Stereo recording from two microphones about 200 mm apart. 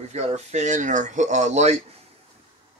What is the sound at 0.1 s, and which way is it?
Speech, 35° right (ahead or behind).